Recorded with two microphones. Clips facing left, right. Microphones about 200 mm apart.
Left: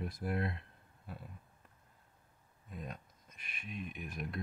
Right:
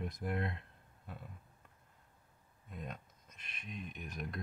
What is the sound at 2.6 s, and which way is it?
Speech, centre (ahead or behind).